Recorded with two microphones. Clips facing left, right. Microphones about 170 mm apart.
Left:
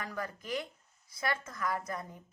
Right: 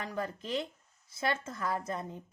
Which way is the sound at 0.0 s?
25° right (ahead or behind).